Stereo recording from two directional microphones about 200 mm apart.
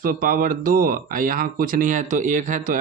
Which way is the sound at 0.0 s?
45° right (ahead or behind).